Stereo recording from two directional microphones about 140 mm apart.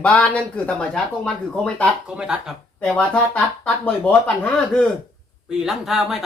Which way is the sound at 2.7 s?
5° left (ahead or behind).